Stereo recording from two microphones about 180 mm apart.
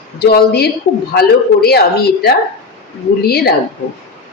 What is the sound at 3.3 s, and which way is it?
Speech, 60° left (ahead or behind).